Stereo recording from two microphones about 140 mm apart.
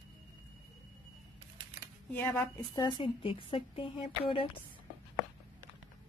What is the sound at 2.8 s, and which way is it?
A woman's voice, 30° left (ahead or behind).